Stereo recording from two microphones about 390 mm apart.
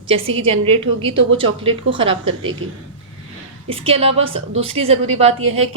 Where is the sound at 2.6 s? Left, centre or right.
Right.